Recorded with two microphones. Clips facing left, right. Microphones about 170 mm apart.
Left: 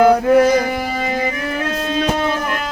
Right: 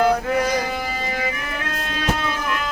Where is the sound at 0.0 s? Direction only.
50° left (ahead or behind).